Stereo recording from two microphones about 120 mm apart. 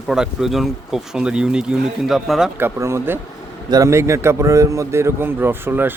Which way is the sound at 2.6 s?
20° right (ahead or behind).